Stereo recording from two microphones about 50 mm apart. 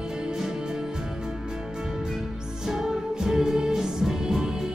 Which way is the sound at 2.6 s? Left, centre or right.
Centre.